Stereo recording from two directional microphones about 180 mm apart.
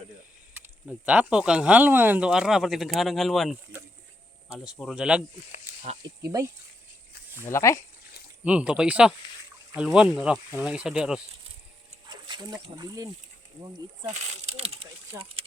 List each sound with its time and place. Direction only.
0.9 s speech: 5° right (ahead or behind)
6.0 s speech: 15° right (ahead or behind)
7.4 s speech: 15° left (ahead or behind)
8.4 s speech: 5° right (ahead or behind)
12.0 s a sound: 25° right (ahead or behind)
12.7 s speech: 20° right (ahead or behind)
14.1 s speech: 35° right (ahead or behind)